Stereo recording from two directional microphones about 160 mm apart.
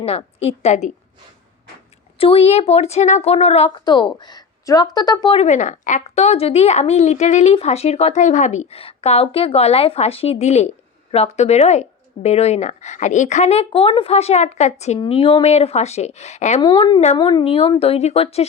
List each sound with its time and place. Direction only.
0.0 s a woman's voice: 40° left (ahead or behind)
2.1 s a woman's voice: 35° left (ahead or behind)
3.8 s a woman's voice: 25° left (ahead or behind)
5.4 s a woman's voice: 50° left (ahead or behind)
14.9 s speech: 30° left (ahead or behind)
16.6 s a woman's voice: 30° left (ahead or behind)